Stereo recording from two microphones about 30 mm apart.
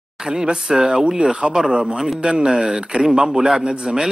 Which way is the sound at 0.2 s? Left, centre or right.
Right.